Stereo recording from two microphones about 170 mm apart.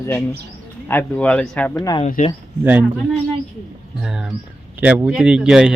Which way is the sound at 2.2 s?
50° left (ahead or behind).